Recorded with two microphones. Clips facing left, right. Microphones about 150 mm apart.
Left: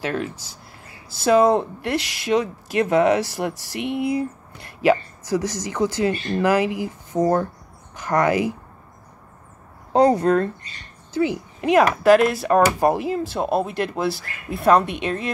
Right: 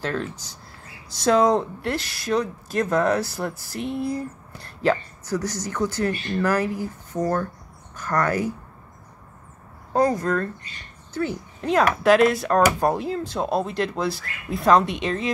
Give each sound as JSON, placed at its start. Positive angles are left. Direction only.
{"t": 0.0, "sound": "speech", "side_deg": 10}
{"t": 3.4, "sound": "speech", "side_deg": 90}
{"t": 4.2, "sound": "speech", "side_deg": 10}
{"t": 9.9, "sound": "speech", "side_deg": 25}
{"t": 11.8, "sound": "speech", "side_deg": 0}